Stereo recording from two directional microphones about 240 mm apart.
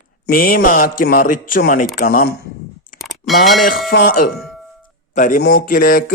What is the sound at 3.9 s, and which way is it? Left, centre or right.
A man's voice, left.